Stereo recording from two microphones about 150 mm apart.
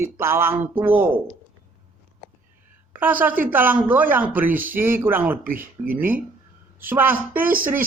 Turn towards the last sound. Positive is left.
turn(degrees=-15)  # may be behind; listen again after turning